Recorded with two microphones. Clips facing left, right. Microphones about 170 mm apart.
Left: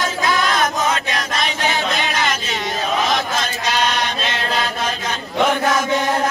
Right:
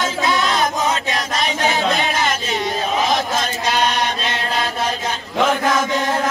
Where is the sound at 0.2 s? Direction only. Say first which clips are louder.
Even; 25° right (ahead or behind).